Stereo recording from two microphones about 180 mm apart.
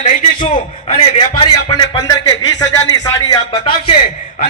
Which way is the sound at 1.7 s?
25° left (ahead or behind).